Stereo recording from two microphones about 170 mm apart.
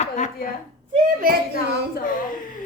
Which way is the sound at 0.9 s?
55° right (ahead or behind).